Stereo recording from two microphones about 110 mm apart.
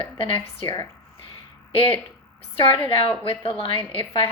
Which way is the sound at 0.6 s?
40° left (ahead or behind).